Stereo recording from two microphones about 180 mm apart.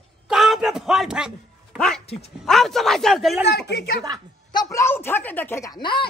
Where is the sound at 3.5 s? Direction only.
65° left (ahead or behind).